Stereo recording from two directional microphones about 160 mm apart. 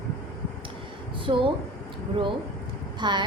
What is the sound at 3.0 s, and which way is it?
Speech, 30° right (ahead or behind).